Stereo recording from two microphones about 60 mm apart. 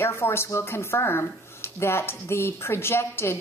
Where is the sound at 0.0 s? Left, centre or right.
Left.